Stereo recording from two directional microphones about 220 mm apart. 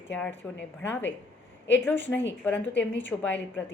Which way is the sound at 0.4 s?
5° left (ahead or behind).